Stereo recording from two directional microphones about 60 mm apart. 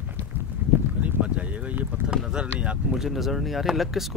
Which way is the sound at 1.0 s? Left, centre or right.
Right.